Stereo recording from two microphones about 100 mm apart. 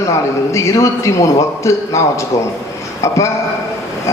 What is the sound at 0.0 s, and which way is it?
A man's voice, 30° left (ahead or behind).